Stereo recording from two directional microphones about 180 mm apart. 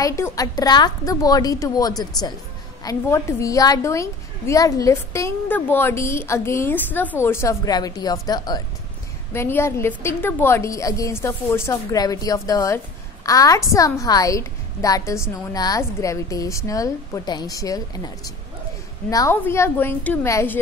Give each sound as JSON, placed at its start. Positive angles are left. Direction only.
{"t": 0.0, "sound": "a woman's voice", "side_deg": 15}